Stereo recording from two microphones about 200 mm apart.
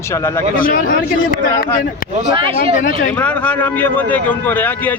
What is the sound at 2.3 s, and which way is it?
Speech, 25° right (ahead or behind).